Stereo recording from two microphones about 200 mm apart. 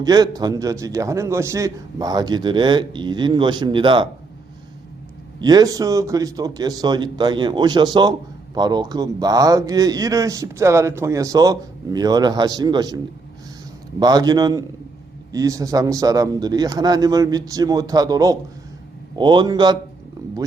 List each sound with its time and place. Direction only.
0.0 s a man's voice: 20° right (ahead or behind)
5.4 s a man's voice: 20° right (ahead or behind)
14.0 s a man's voice: 20° right (ahead or behind)